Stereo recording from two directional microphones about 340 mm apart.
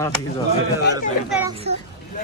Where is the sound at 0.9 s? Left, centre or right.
Centre.